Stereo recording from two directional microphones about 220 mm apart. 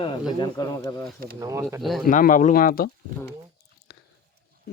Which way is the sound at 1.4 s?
15° right (ahead or behind).